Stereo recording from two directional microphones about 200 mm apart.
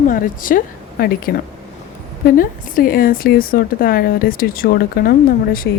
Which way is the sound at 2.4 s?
45° left (ahead or behind).